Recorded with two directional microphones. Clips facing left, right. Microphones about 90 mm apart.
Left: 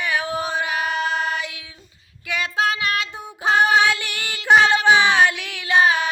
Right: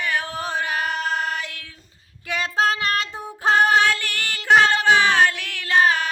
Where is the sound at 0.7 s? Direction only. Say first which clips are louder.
Left 1 dB; 45° right (ahead or behind).